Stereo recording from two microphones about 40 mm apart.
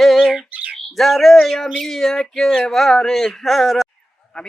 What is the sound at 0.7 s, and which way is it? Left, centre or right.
Speech, centre.